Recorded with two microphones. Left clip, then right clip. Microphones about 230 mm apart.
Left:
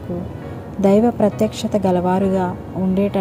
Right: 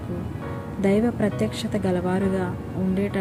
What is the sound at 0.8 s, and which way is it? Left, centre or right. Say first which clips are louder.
A woman's voice: left 8 dB; centre.